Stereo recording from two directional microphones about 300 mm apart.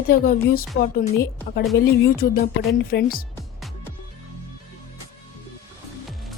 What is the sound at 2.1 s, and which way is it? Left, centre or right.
Speech, left.